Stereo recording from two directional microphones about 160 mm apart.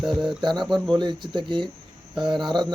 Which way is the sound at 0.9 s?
30° right (ahead or behind).